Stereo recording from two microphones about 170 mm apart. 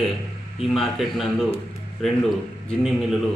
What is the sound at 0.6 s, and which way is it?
A man's voice, centre (ahead or behind).